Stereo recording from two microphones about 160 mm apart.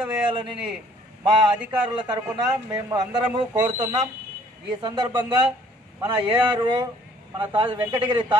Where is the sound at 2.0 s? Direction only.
25° right (ahead or behind).